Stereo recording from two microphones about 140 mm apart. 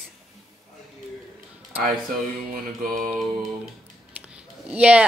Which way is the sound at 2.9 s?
Centre (ahead or behind).